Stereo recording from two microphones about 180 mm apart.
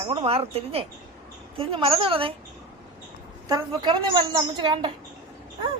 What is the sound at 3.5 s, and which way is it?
A woman's voice, 20° right (ahead or behind).